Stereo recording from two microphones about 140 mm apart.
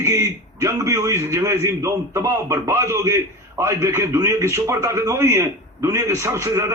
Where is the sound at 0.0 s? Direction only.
20° right (ahead or behind).